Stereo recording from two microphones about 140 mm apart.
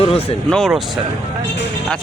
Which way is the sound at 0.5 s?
Centre (ahead or behind).